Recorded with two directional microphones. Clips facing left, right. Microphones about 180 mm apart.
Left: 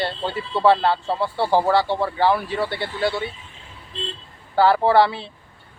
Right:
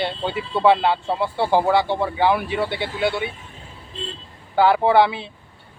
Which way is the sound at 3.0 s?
55° right (ahead or behind).